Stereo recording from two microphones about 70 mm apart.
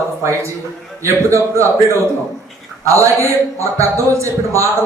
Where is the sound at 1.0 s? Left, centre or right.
Right.